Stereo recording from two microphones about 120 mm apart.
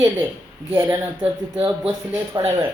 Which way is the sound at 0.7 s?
15° right (ahead or behind).